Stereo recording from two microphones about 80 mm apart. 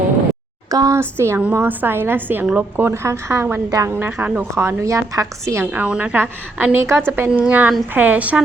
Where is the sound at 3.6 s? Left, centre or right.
Right.